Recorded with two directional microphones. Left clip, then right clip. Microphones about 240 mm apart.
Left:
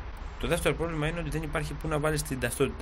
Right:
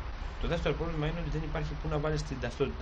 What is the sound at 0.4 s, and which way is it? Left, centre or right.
Speech, left.